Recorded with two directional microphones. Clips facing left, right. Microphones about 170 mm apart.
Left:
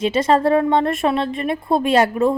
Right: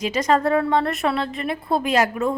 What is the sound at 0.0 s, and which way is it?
A woman's voice, 30° left (ahead or behind).